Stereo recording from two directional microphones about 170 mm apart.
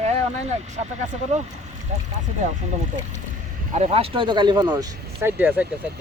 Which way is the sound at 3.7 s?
35° right (ahead or behind).